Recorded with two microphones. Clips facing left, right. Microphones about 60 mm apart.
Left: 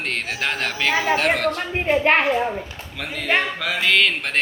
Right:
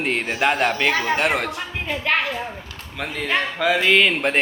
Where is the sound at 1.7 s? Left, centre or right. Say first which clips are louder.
Left 5 dB; left.